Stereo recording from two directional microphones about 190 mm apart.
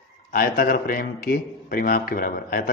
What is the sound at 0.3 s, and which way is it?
A man's voice, 50° left (ahead or behind).